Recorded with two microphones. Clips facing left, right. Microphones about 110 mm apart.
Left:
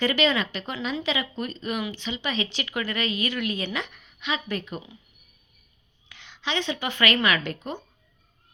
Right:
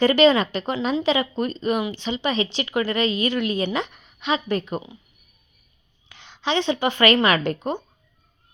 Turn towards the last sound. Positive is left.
turn(degrees=-35)  # may be behind; listen again after turning